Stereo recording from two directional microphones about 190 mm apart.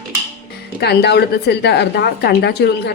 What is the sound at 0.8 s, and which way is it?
A woman's voice, 60° left (ahead or behind).